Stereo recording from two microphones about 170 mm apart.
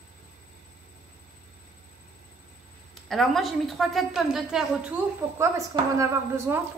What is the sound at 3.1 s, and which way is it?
A woman's voice, centre (ahead or behind).